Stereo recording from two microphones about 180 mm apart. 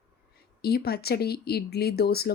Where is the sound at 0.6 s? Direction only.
60° left (ahead or behind).